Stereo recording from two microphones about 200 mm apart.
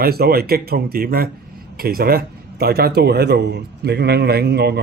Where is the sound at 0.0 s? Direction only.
50° right (ahead or behind).